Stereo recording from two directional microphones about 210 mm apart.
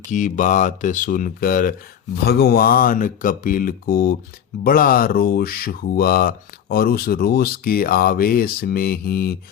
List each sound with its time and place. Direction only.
0.1 s speech: 35° left (ahead or behind)